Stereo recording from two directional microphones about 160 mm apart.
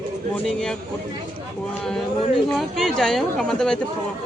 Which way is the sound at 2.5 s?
5° left (ahead or behind).